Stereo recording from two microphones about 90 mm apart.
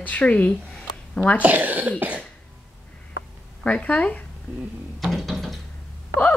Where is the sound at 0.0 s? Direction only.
15° left (ahead or behind).